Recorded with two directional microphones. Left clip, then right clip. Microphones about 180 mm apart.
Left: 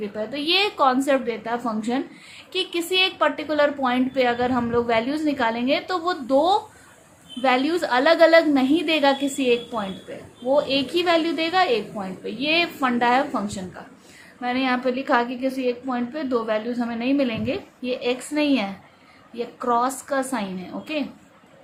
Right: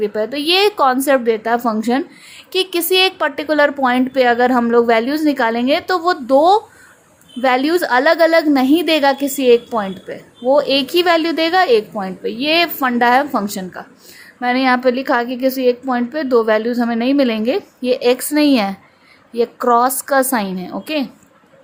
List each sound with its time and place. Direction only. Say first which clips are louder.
0.0 s a woman's voice: right 9 dB; 50° right (ahead or behind)